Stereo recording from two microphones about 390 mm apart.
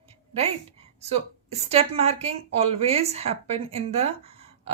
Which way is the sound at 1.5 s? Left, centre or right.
Centre.